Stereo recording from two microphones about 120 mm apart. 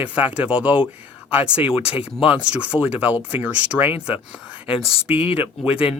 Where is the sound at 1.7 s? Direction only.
50° left (ahead or behind).